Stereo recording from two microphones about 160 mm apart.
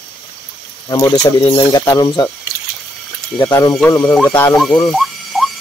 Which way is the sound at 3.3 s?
15° left (ahead or behind).